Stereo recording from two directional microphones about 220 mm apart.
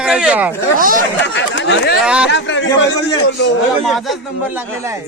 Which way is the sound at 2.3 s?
55° left (ahead or behind).